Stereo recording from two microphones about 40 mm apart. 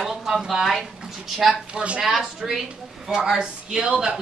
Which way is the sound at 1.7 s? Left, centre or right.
Right.